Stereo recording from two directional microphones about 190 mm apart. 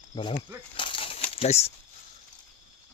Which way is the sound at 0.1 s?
25° left (ahead or behind).